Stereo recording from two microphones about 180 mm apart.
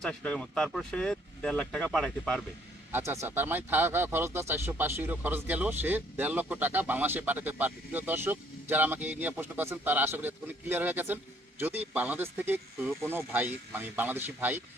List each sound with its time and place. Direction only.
0.0 s speech: 5° left (ahead or behind)
2.9 s speech: 15° right (ahead or behind)